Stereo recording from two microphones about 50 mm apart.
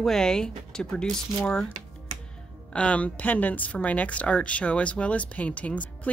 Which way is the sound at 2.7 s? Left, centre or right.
Left.